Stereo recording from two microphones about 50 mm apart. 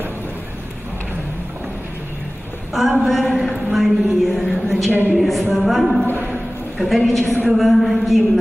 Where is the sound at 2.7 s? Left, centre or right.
Centre.